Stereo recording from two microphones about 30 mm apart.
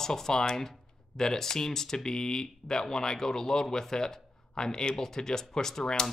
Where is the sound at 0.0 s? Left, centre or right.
Centre.